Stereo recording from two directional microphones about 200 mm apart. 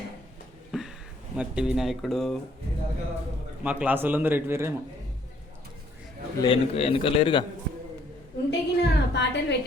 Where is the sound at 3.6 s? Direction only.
5° right (ahead or behind).